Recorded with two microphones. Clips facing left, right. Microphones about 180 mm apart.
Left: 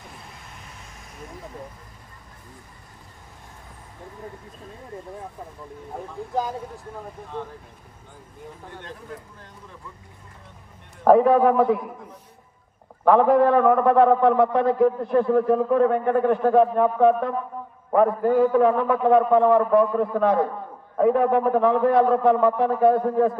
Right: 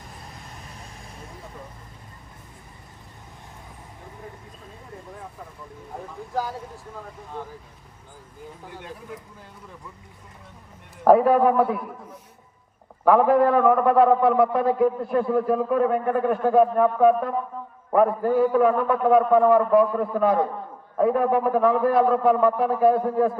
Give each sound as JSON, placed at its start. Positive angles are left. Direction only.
{"t": 6.3, "sound": "speech", "side_deg": 20}
{"t": 8.7, "sound": "a man's voice", "side_deg": -10}
{"t": 11.0, "sound": "a man's voice", "side_deg": -5}
{"t": 13.1, "sound": "a man's voice", "side_deg": -5}